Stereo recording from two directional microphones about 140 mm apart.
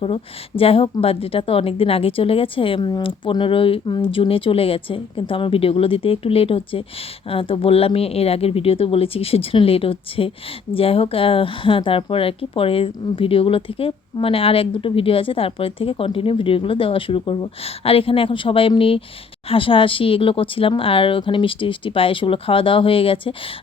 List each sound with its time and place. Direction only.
0.0 s speech: 40° left (ahead or behind)